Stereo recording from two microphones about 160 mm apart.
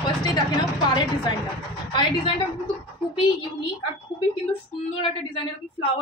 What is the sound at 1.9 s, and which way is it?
Speech, 30° left (ahead or behind).